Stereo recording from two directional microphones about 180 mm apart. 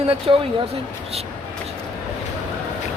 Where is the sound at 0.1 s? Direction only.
35° right (ahead or behind).